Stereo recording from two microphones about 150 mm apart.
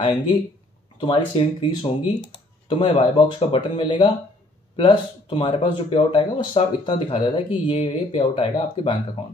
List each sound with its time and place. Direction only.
0.0 s speech: 35° left (ahead or behind)